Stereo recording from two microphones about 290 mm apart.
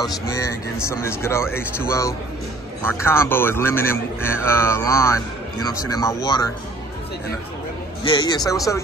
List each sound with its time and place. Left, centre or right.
0.0 s speech: centre
8.1 s speech: centre